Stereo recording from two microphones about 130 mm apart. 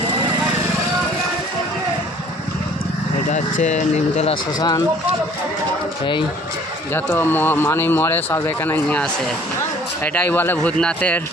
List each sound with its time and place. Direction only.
3.2 s speech: 65° left (ahead or behind)
6.9 s speech: 15° left (ahead or behind)